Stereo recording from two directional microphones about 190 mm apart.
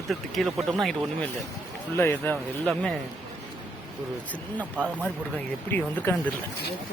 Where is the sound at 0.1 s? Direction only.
Centre (ahead or behind).